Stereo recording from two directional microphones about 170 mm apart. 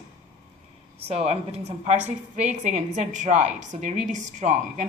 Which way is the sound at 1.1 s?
35° right (ahead or behind).